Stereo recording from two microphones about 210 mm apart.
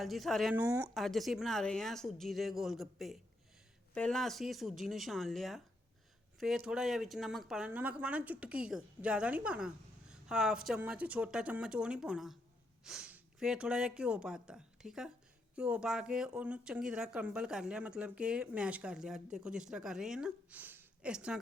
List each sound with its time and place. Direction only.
0.0 s speech: centre (ahead or behind)
0.5 s speech: 15° right (ahead or behind)
0.9 s speech: centre (ahead or behind)
3.9 s speech: 5° left (ahead or behind)